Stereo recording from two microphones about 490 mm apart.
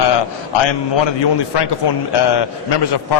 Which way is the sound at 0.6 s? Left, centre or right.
Left.